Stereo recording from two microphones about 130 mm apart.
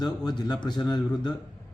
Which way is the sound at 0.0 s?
35° left (ahead or behind).